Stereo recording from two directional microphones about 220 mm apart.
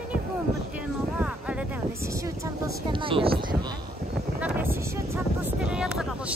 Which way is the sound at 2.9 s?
25° right (ahead or behind).